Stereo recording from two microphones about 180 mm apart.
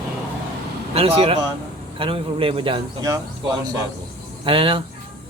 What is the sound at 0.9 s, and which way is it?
A man's voice, 35° right (ahead or behind).